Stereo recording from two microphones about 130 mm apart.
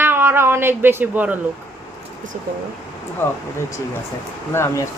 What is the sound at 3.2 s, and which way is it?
Speech, 15° left (ahead or behind).